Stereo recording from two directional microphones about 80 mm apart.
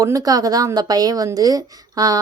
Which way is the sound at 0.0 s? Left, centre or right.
Right.